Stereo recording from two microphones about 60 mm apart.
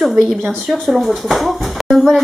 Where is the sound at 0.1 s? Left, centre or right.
Right.